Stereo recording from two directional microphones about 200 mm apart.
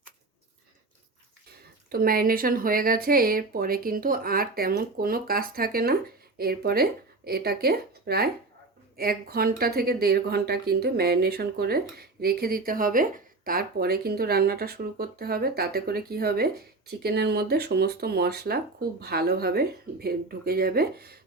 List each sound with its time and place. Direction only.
1.9 s speech: 45° right (ahead or behind)